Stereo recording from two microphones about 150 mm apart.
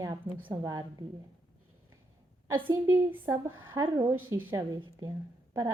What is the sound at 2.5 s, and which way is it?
A woman's voice, 20° right (ahead or behind).